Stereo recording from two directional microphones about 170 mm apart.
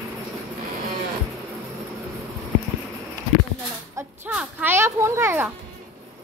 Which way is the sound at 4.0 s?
10° right (ahead or behind).